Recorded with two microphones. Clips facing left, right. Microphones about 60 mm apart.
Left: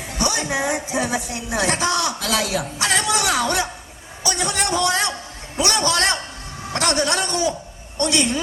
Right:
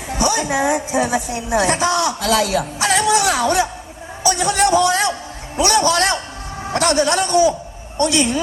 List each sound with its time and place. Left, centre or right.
0.2 s a woman's voice: right
2.7 s music: right
4.2 s a sound: right
6.7 s a man's voice: right